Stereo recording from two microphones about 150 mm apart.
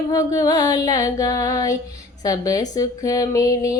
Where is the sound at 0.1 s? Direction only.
25° left (ahead or behind).